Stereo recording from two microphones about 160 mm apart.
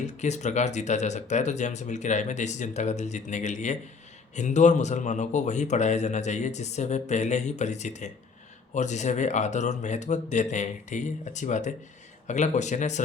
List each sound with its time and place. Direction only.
0.2 s a man's voice: 45° left (ahead or behind)